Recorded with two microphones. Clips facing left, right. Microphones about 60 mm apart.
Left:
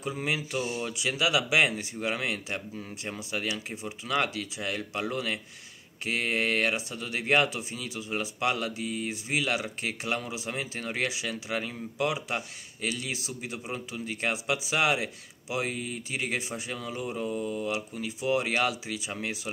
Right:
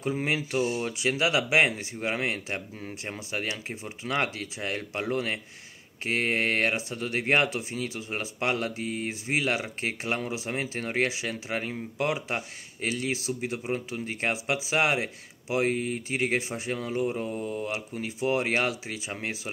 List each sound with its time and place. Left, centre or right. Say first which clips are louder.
0.0 s speech: right 3 dB; right